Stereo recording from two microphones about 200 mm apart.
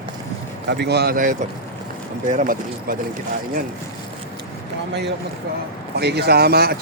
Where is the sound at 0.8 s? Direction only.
55° right (ahead or behind).